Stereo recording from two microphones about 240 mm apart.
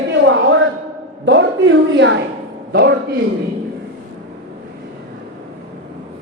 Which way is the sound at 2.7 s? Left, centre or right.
Right.